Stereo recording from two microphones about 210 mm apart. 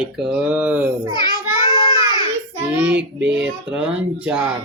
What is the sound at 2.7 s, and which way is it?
A child's voice, 10° right (ahead or behind).